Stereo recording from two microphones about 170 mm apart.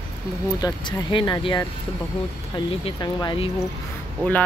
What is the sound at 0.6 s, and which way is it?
Speech, 30° left (ahead or behind).